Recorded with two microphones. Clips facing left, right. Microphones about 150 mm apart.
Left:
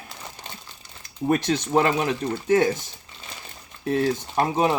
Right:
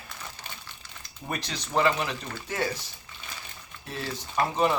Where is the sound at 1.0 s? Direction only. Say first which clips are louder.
Left 13 dB; 50° left (ahead or behind).